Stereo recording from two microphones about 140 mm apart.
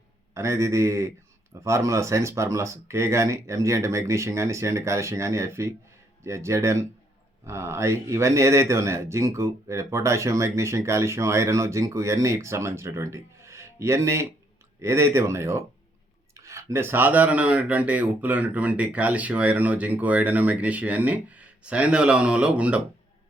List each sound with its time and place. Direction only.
0.3 s speech: 20° right (ahead or behind)